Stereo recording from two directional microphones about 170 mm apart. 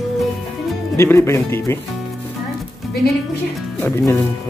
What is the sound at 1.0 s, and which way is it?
Speech, 15° left (ahead or behind).